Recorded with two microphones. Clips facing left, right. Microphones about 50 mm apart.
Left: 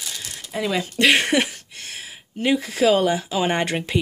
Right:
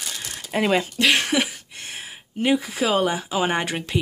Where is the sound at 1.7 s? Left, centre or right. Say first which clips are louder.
Even; right.